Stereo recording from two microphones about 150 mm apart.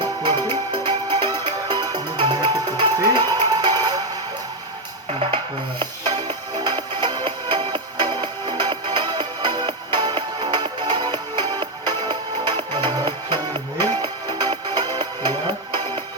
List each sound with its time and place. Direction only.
0.0 s music: 30° right (ahead or behind)
5.8 s music: 30° right (ahead or behind)